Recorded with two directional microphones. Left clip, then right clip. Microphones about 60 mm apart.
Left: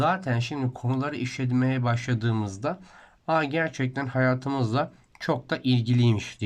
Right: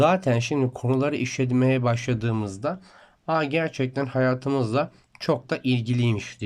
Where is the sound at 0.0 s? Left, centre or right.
Right.